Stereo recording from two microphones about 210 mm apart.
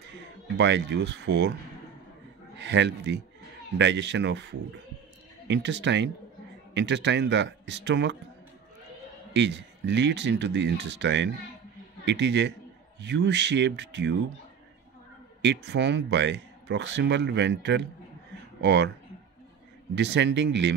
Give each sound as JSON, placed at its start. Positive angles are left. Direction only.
{"t": 0.6, "sound": "speech", "side_deg": -55}
{"t": 2.6, "sound": "speech", "side_deg": -55}
{"t": 9.3, "sound": "speech", "side_deg": -55}
{"t": 15.4, "sound": "speech", "side_deg": -55}
{"t": 20.0, "sound": "speech", "side_deg": -55}